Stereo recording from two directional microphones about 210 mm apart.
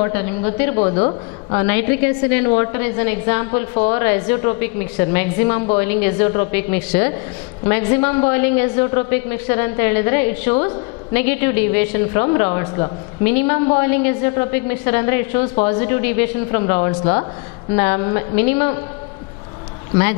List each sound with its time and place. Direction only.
0.0 s a woman's voice: 10° left (ahead or behind)
0.8 s speech: 30° left (ahead or behind)
1.6 s a woman's voice: 10° left (ahead or behind)
19.9 s speech: 15° left (ahead or behind)